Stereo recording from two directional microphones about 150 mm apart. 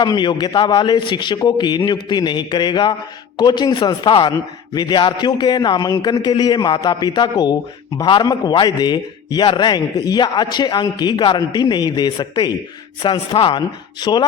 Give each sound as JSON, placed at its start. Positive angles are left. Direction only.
{"t": 0.0, "sound": "a man's voice", "side_deg": 30}